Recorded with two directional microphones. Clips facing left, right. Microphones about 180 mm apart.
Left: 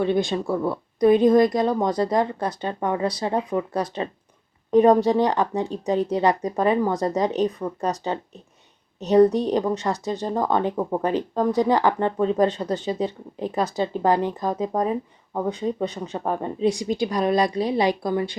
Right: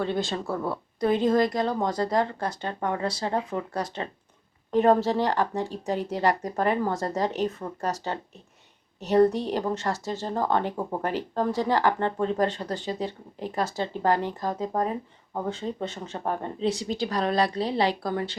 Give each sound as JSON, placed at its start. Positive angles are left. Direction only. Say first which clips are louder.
{"t": 0.0, "sound": "speech", "louder": "left 6 dB", "side_deg": 15}